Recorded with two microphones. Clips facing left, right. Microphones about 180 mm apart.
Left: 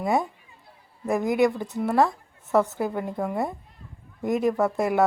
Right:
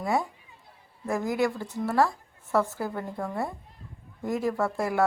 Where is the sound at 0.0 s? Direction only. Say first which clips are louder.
Left 3 dB; 20° left (ahead or behind).